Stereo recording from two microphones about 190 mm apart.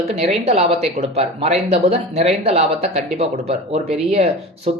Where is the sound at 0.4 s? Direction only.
35° right (ahead or behind).